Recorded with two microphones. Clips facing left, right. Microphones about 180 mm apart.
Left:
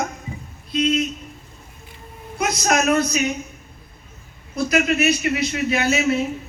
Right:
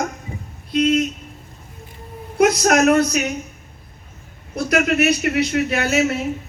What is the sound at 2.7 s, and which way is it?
Speech, 55° right (ahead or behind).